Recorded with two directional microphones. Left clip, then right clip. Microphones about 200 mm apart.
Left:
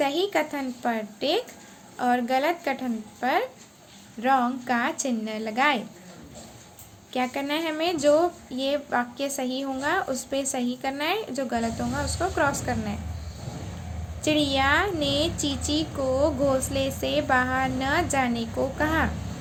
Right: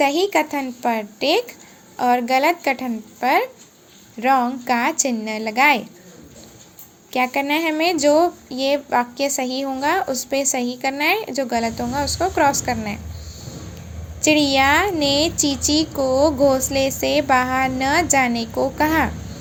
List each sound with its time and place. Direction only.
0.0 s speech: 20° right (ahead or behind)
7.1 s speech: 20° right (ahead or behind)
14.2 s speech: 20° right (ahead or behind)